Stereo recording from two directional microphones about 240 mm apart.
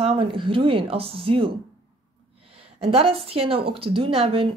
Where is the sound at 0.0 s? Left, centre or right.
Right.